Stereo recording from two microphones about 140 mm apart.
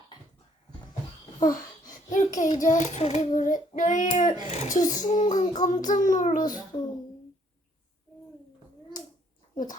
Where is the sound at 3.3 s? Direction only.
65° left (ahead or behind).